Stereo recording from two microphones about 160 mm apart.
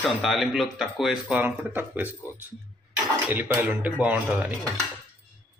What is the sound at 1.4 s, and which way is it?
Speech, 10° right (ahead or behind).